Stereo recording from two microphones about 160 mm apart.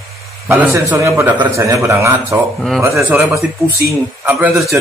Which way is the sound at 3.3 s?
20° right (ahead or behind).